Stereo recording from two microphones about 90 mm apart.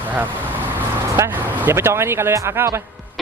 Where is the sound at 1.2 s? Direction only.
20° right (ahead or behind).